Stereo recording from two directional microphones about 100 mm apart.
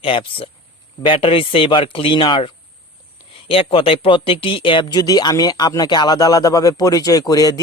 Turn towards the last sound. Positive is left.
turn(degrees=40)  # may be behind; listen again after turning